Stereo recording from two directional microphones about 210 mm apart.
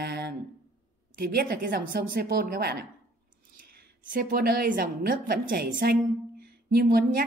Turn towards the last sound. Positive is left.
turn(degrees=-45)  # may be behind; listen again after turning